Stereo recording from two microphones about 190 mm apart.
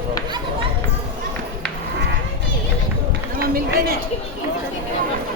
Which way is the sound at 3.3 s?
50° right (ahead or behind).